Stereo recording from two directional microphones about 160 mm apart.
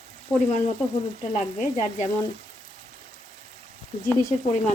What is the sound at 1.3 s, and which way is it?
Frying, 45° left (ahead or behind).